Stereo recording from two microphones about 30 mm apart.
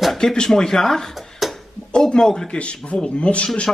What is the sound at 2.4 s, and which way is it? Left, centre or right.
Speech, left.